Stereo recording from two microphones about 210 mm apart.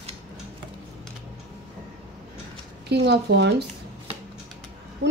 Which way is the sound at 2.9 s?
50° right (ahead or behind).